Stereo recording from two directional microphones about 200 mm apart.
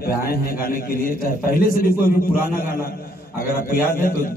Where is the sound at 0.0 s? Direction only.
50° left (ahead or behind).